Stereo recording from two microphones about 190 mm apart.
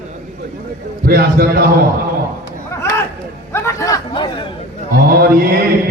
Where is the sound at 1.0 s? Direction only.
55° right (ahead or behind).